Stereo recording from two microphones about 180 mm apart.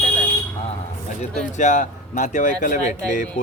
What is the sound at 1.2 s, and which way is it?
Speech, 45° left (ahead or behind).